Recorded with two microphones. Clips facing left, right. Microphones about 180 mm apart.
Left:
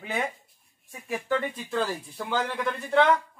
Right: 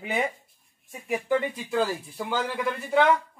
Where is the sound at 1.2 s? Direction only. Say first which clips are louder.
Right 2 dB; 10° right (ahead or behind).